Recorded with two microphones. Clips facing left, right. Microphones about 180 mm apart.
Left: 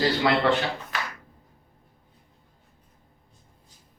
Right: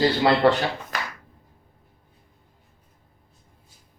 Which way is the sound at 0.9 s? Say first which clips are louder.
Right 1 dB; 40° right (ahead or behind).